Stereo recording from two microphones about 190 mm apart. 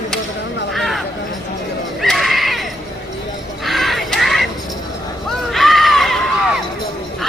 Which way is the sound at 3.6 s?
Centre (ahead or behind).